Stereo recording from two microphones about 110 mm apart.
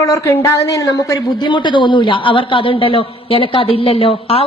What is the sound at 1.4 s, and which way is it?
A man's voice, 45° left (ahead or behind).